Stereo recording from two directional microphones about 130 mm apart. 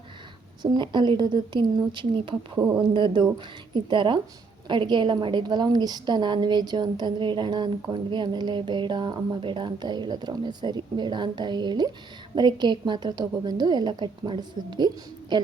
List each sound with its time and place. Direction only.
0.6 s a woman's voice: 35° right (ahead or behind)